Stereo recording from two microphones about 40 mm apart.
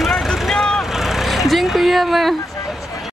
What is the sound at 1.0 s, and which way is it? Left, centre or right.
Speech, centre.